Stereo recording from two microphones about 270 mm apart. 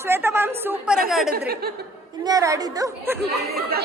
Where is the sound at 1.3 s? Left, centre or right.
Right.